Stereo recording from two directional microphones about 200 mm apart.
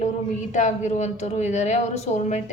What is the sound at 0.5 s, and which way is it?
A woman's voice, 35° left (ahead or behind).